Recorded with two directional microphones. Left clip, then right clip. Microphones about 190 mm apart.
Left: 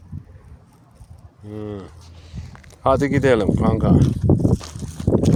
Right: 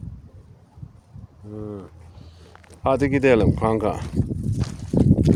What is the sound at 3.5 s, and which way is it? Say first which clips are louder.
Speech: left 2 dB; 35° right (ahead or behind).